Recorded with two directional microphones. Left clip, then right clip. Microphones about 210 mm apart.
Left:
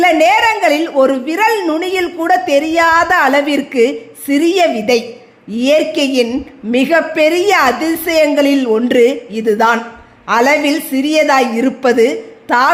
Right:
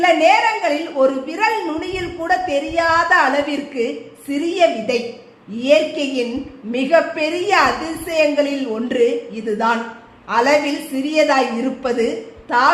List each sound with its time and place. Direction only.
0.0 s a woman's voice: 45° left (ahead or behind)